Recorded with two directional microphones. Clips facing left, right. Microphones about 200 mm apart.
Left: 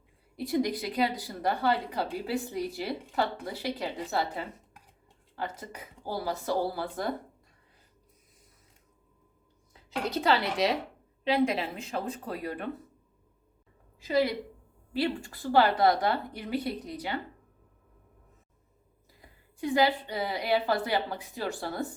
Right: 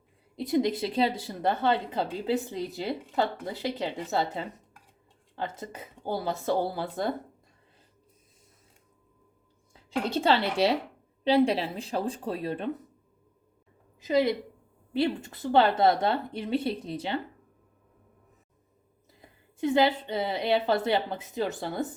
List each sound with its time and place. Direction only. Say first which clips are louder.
0.3 s a woman's voice: right 3 dB; 20° right (ahead or behind)
10.1 s a woman's voice: right 2 dB; 30° right (ahead or behind)
14.0 s a woman's voice: right 2 dB; 20° right (ahead or behind)
19.2 s a woman's voice: right 5 dB; 25° right (ahead or behind)